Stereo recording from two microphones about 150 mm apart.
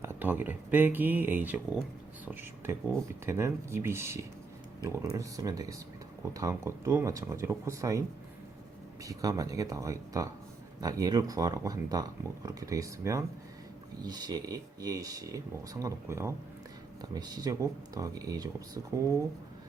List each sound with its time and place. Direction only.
0.0 s speech: 15° right (ahead or behind)
4.8 s speech: 15° left (ahead or behind)
5.1 s speech: 20° right (ahead or behind)
9.0 s speech: 20° right (ahead or behind)